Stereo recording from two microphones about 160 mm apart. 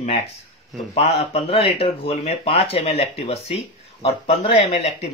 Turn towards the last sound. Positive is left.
turn(degrees=40)  # may be behind; listen again after turning